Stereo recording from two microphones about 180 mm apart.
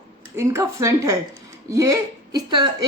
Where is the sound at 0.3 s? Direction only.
15° right (ahead or behind).